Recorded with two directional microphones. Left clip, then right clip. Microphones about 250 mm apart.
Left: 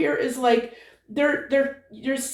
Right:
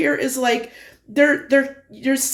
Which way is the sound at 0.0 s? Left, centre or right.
Right.